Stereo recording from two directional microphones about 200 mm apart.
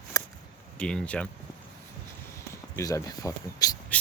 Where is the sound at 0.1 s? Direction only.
15° left (ahead or behind).